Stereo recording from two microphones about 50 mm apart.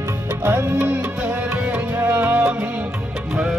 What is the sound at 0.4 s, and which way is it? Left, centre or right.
Music, right.